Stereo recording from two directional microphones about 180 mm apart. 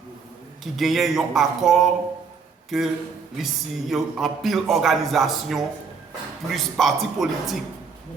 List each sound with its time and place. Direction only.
0.6 s a man's voice: centre (ahead or behind)